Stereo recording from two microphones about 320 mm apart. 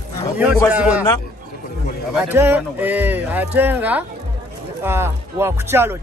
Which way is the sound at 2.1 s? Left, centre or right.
Centre.